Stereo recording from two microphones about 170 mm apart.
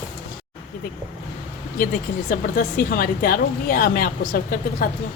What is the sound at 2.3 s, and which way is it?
A woman's voice, 55° left (ahead or behind).